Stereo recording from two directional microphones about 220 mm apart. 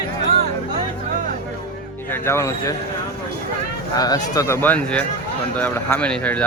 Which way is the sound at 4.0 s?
15° left (ahead or behind).